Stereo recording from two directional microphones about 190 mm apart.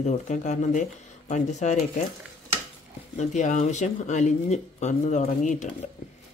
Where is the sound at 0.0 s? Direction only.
40° left (ahead or behind).